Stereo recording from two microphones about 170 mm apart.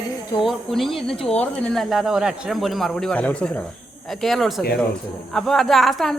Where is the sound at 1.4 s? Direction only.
5° left (ahead or behind).